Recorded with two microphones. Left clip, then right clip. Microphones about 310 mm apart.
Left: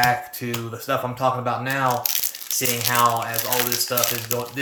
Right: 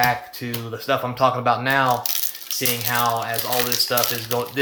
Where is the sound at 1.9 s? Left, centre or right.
Centre.